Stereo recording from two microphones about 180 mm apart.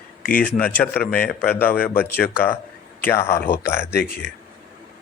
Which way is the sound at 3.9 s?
60° left (ahead or behind).